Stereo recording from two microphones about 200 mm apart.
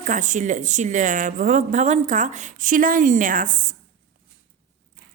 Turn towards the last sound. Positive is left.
turn(degrees=-40)  # may be behind; listen again after turning